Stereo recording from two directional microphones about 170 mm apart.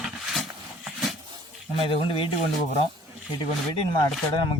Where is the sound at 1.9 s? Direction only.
30° left (ahead or behind).